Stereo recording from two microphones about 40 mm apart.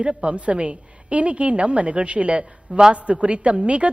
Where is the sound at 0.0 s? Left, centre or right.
Right.